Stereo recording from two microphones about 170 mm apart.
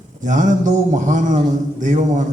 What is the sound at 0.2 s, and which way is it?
A man's voice, 45° right (ahead or behind).